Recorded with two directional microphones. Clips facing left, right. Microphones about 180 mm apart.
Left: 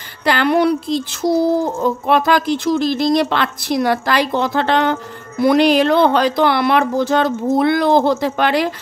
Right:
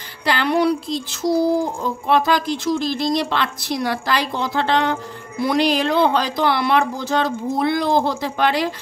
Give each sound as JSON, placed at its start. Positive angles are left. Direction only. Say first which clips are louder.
{"t": 0.2, "sound": "speech", "louder": "left 4 dB", "side_deg": 55}